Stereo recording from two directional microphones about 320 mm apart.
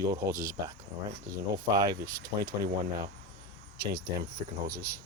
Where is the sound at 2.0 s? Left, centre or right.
Right.